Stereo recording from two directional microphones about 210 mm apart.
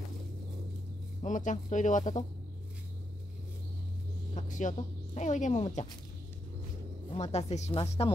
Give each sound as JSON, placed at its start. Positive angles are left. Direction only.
{"t": 1.2, "sound": "speech", "side_deg": 35}
{"t": 4.3, "sound": "speech", "side_deg": 35}
{"t": 7.2, "sound": "speech", "side_deg": 30}